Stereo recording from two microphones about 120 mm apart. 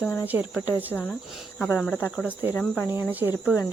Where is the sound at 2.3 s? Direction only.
15° right (ahead or behind).